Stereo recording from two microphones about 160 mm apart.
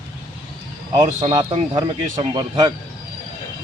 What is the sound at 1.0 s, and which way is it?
A man's voice, 25° right (ahead or behind).